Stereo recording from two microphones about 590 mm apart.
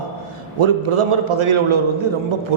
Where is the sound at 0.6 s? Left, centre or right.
Right.